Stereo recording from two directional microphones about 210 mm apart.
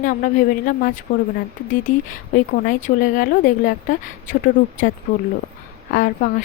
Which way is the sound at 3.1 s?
40° left (ahead or behind).